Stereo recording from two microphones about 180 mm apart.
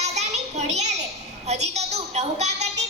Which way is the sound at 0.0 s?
40° right (ahead or behind).